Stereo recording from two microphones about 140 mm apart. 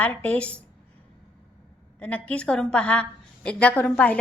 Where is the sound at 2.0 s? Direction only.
10° left (ahead or behind).